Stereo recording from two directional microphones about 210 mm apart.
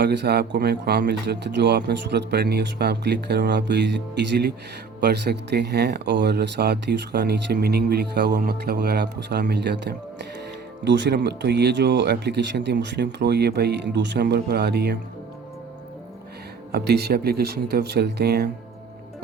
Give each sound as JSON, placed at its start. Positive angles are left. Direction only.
{"t": 0.0, "sound": "speech", "side_deg": -50}
{"t": 16.7, "sound": "speech", "side_deg": -50}